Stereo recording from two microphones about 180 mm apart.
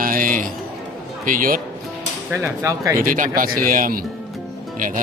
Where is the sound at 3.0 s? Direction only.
50° right (ahead or behind).